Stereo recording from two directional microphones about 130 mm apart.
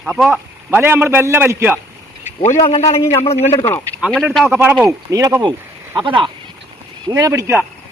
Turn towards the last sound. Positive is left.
turn(degrees=-20)  # may be behind; listen again after turning